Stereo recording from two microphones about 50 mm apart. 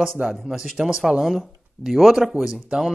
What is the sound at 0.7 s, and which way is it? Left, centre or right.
Speech, centre.